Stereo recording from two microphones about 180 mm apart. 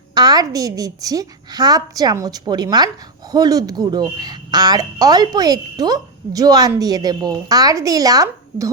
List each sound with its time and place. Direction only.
0.1 s speech: 20° right (ahead or behind)